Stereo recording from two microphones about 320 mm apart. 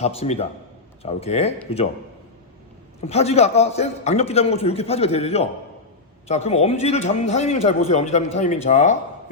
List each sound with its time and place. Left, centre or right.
0.0 s a man's voice: centre
3.0 s a man's voice: centre